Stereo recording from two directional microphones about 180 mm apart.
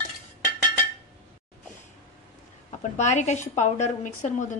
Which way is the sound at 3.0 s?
40° left (ahead or behind).